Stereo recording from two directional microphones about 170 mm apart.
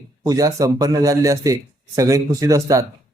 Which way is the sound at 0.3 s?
20° right (ahead or behind).